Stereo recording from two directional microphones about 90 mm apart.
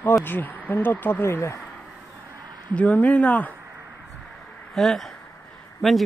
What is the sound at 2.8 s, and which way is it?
Speech, 15° left (ahead or behind).